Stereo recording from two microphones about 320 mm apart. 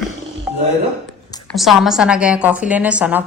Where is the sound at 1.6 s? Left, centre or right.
Centre.